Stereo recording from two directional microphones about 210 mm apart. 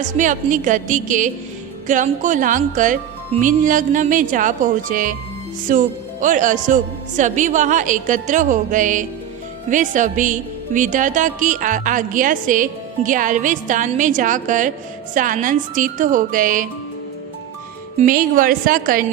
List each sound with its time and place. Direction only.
0.0 s speech: 35° right (ahead or behind)
17.9 s speech: 40° right (ahead or behind)